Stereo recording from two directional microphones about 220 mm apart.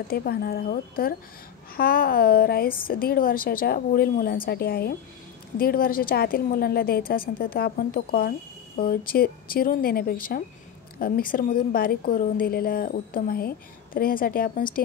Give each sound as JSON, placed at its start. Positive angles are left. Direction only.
{"t": 0.1, "sound": "a woman's voice", "side_deg": 45}